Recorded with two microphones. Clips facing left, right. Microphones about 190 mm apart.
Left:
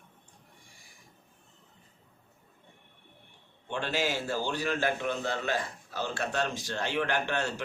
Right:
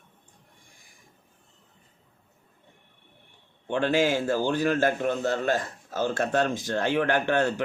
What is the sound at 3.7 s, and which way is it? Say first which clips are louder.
A man's voice: right 8 dB; 50° right (ahead or behind).